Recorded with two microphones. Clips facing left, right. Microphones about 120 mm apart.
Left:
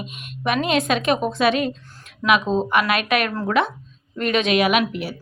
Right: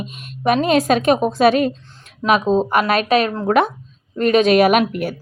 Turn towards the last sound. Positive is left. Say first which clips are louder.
# right 5 dB
turn(degrees=-50)  # may be behind; listen again after turning